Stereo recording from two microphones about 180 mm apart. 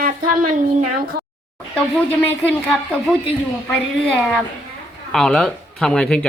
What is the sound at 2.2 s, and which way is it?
Speech, 10° left (ahead or behind).